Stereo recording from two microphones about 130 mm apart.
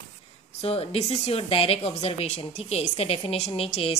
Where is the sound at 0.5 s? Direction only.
50° left (ahead or behind).